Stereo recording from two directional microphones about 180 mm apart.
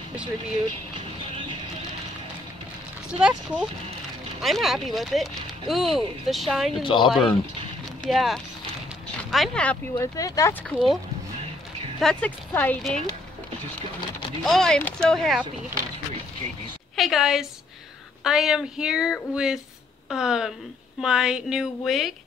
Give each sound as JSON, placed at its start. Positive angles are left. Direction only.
{"t": 0.9, "sound": "vehicle", "side_deg": -25}
{"t": 3.1, "sound": "speech", "side_deg": -5}
{"t": 6.8, "sound": "speech", "side_deg": 25}
{"t": 7.1, "sound": "speech", "side_deg": 0}
{"t": 10.1, "sound": "speech", "side_deg": 20}
{"t": 12.0, "sound": "speech", "side_deg": 5}
{"t": 14.4, "sound": "speech", "side_deg": 0}
{"t": 16.9, "sound": "a woman's voice", "side_deg": 0}